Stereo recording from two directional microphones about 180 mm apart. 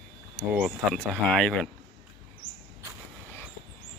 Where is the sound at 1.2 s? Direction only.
5° left (ahead or behind).